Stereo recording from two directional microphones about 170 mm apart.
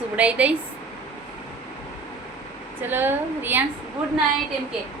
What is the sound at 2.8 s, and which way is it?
Speech, 10° right (ahead or behind).